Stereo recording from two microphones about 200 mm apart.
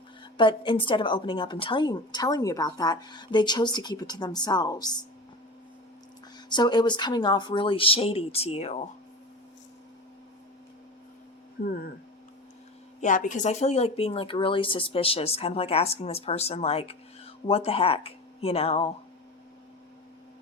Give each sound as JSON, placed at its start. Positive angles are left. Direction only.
{"t": 0.3, "sound": "speech", "side_deg": 25}
{"t": 6.5, "sound": "speech", "side_deg": 20}
{"t": 13.0, "sound": "speech", "side_deg": 40}